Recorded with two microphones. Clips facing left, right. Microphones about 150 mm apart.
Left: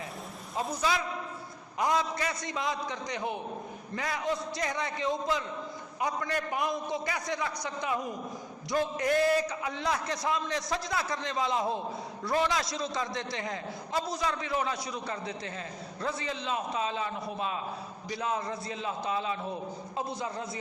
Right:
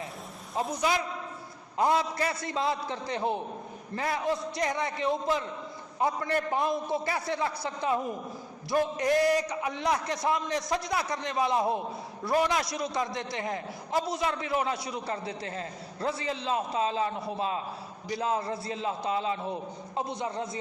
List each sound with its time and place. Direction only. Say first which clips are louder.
0.8 s a man's voice: right 1 dB; 25° right (ahead or behind)
12.6 s a man's voice: right 2 dB; 25° left (ahead or behind)
12.9 s a man's voice: right 2 dB; 20° right (ahead or behind)